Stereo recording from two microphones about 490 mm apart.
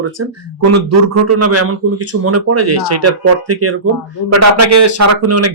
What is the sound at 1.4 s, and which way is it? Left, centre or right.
Speech, right.